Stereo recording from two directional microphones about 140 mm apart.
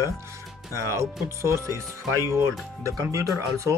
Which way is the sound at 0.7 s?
20° right (ahead or behind).